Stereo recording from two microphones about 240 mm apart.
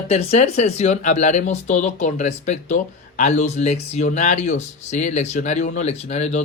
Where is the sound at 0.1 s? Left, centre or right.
Left.